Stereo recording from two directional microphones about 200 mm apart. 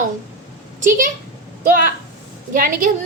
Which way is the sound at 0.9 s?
40° right (ahead or behind).